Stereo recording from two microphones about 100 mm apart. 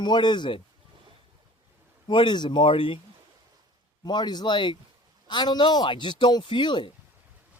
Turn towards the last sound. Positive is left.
turn(degrees=50)  # may be behind; listen again after turning